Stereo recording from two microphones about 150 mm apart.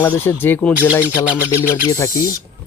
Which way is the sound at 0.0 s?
15° left (ahead or behind).